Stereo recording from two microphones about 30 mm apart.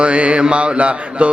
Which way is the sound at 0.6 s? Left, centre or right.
Right.